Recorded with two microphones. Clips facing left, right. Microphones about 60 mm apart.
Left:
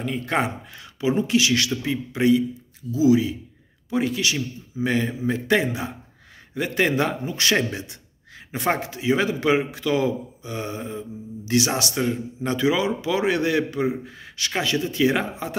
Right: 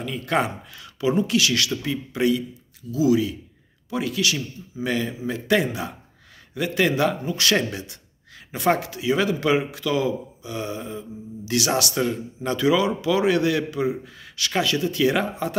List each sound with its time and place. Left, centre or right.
0.0 s a man's voice: left